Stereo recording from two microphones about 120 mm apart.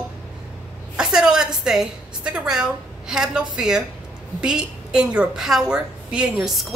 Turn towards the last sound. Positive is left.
turn(degrees=0)  # may be behind; listen again after turning